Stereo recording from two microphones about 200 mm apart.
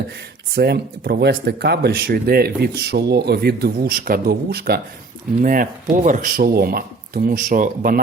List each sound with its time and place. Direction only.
0.5 s speech: 55° right (ahead or behind)